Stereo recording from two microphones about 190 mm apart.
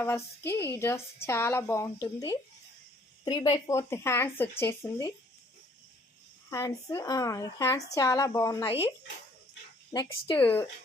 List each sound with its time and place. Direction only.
0.0 s a woman's voice: 10° left (ahead or behind)
6.5 s a woman's voice: 15° left (ahead or behind)
9.9 s speech: 20° left (ahead or behind)
10.3 s a woman's voice: 10° left (ahead or behind)